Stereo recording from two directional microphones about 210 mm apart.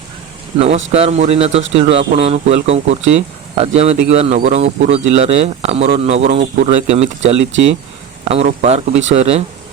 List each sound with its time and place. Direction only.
0.6 s speech: 30° right (ahead or behind)